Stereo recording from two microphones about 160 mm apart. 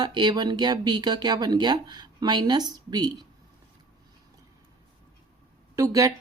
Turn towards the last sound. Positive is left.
turn(degrees=-20)  # may be behind; listen again after turning